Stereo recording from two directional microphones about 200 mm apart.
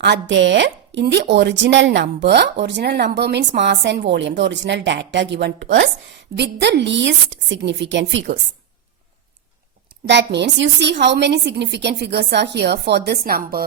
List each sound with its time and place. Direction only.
0.0 s speech: 60° right (ahead or behind)
10.1 s speech: 60° right (ahead or behind)